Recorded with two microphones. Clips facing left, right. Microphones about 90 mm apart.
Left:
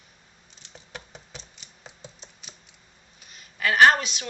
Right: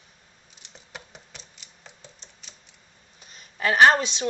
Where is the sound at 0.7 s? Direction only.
Centre (ahead or behind).